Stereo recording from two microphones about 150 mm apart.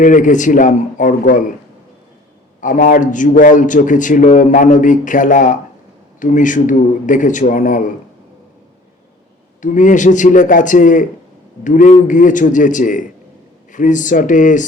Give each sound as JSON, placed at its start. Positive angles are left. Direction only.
{"t": 0.0, "sound": "a man's voice", "side_deg": 60}
{"t": 2.6, "sound": "a man's voice", "side_deg": 60}
{"t": 9.6, "sound": "a man's voice", "side_deg": 55}